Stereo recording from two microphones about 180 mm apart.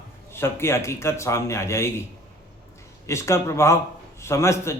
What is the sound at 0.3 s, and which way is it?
A man's voice, 15° left (ahead or behind).